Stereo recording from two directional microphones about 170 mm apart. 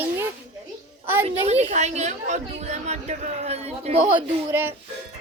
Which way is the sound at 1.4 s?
40° right (ahead or behind).